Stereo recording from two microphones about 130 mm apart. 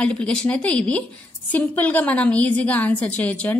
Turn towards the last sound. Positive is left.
turn(degrees=10)  # may be behind; listen again after turning